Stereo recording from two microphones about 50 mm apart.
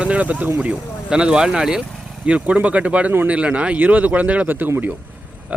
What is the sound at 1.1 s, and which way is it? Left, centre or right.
Speech, centre.